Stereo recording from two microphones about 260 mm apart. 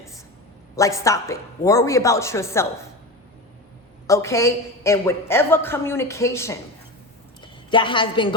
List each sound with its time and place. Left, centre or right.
0.8 s a woman's voice: centre
4.0 s a woman's voice: centre